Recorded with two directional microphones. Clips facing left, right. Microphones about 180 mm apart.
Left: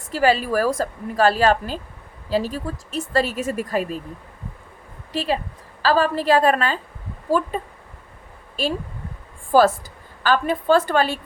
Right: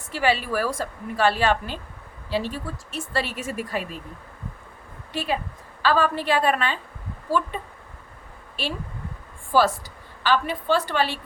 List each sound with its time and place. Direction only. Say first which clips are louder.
0.1 s a woman's voice: left 5 dB; 40° left (ahead or behind)
5.1 s a woman's voice: left 3 dB; 35° left (ahead or behind)
9.5 s a woman's voice: left 5 dB; 45° left (ahead or behind)